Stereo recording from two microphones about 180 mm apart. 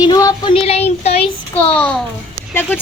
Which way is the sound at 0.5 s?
35° left (ahead or behind).